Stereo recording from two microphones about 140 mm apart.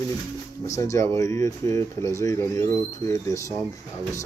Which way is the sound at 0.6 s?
20° left (ahead or behind).